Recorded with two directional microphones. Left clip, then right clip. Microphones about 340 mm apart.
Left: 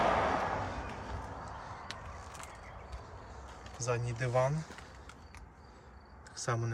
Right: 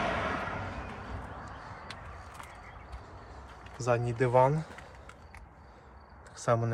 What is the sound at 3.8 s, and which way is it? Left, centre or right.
Speech, centre.